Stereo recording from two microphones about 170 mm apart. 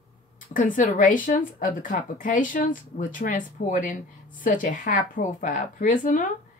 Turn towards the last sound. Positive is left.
turn(degrees=50)  # may be behind; listen again after turning